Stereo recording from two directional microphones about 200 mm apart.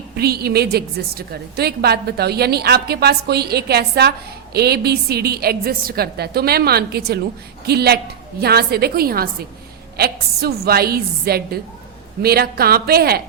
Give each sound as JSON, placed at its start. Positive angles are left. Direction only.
{"t": 0.2, "sound": "a woman's voice", "side_deg": -50}